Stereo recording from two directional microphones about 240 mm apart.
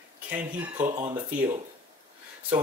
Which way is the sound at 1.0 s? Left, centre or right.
Centre.